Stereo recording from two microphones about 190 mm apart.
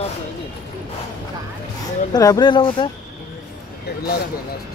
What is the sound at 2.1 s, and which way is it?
Speech, 20° left (ahead or behind).